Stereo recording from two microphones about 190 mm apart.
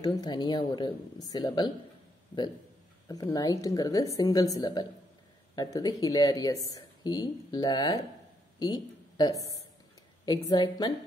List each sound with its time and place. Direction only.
0.0 s speech: 20° left (ahead or behind)
3.1 s speech: 20° left (ahead or behind)